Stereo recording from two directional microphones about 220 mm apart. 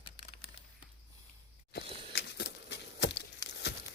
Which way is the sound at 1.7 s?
45° left (ahead or behind).